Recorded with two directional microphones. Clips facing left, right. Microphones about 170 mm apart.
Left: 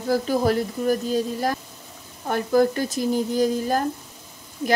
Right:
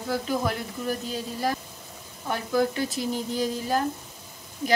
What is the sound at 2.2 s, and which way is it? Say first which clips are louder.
Speech: left 5 dB; 45° left (ahead or behind).